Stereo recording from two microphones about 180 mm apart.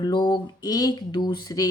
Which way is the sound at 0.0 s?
25° left (ahead or behind).